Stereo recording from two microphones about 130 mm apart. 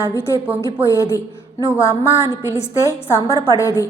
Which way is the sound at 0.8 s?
25° left (ahead or behind).